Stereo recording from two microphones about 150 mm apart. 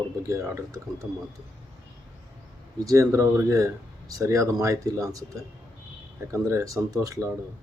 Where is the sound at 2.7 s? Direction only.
20° right (ahead or behind).